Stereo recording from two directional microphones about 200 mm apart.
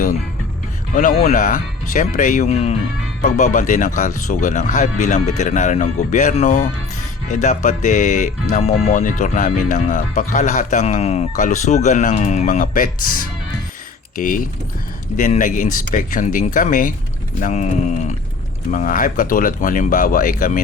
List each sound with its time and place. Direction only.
0.9 s speech: 45° left (ahead or behind)